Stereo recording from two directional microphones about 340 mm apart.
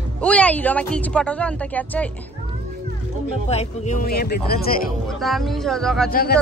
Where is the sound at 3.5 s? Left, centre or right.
Centre.